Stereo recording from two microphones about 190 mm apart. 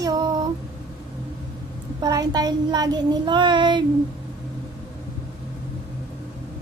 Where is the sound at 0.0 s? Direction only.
20° right (ahead or behind).